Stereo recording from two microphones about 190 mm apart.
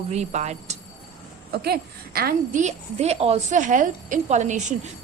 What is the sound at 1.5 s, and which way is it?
A woman's voice, 55° right (ahead or behind).